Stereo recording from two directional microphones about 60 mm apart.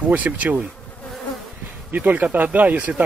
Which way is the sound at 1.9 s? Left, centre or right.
Right.